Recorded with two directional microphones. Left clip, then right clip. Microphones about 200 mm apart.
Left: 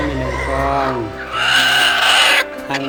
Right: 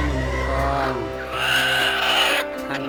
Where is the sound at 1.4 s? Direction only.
10° left (ahead or behind).